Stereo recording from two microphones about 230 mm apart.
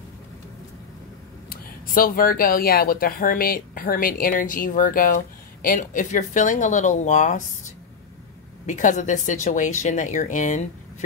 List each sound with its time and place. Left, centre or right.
1.5 s speech: left